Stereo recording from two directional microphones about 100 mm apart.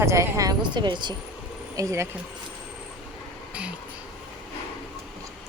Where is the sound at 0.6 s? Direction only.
50° right (ahead or behind).